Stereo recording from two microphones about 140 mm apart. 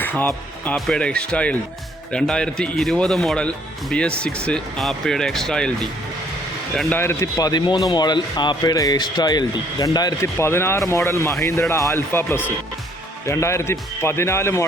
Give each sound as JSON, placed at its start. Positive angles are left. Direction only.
{"t": 0.0, "sound": "a man's voice", "side_deg": 10}
{"t": 10.3, "sound": "a man's voice", "side_deg": 15}